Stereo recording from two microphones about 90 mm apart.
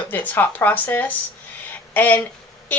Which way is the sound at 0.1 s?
25° left (ahead or behind).